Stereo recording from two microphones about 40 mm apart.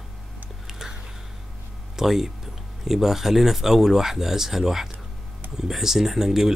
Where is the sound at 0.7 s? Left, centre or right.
Centre.